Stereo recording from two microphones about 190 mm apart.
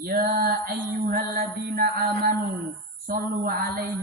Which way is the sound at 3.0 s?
50° right (ahead or behind).